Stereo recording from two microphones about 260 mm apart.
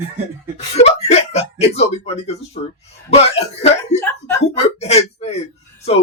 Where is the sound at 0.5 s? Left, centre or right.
Left.